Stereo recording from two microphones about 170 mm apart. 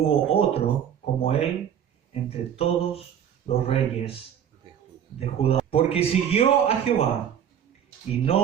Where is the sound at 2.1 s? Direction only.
35° left (ahead or behind).